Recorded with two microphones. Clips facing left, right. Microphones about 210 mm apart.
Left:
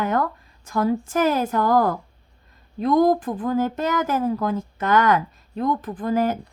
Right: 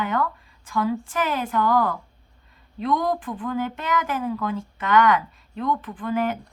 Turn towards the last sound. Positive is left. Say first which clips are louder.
# left 3 dB
turn(degrees=40)  # may be behind; listen again after turning